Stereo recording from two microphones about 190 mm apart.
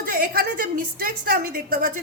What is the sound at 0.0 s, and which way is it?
A woman's voice, 50° right (ahead or behind).